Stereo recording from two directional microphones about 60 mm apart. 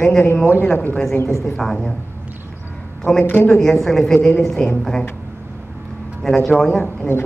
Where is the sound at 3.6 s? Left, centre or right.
Centre.